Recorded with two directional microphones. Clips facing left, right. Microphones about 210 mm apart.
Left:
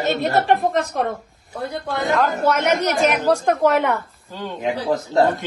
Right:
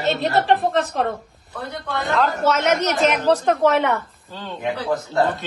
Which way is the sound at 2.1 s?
Centre (ahead or behind).